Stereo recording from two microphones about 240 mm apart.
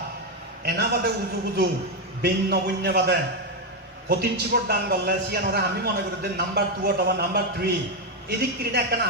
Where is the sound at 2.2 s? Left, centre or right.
Right.